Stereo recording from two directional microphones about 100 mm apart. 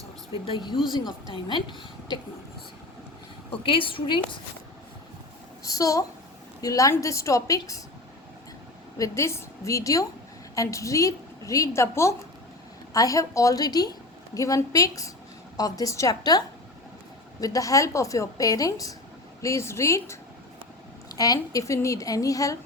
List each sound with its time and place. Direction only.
0.4 s a woman's voice: 55° left (ahead or behind)
3.5 s a woman's voice: 60° left (ahead or behind)
5.6 s a child's voice: 35° left (ahead or behind)
9.0 s a woman's voice: 30° left (ahead or behind)
17.4 s a woman's voice: 35° left (ahead or behind)
21.2 s a woman's voice: 35° left (ahead or behind)